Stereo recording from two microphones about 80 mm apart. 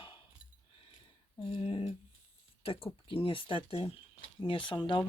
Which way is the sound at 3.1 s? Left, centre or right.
Left.